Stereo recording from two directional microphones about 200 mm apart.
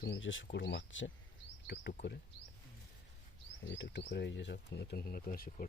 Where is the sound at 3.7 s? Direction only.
60° left (ahead or behind).